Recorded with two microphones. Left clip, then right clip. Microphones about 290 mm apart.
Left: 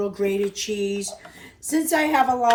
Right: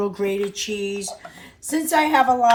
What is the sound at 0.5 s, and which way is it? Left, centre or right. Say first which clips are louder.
Speech: even; right.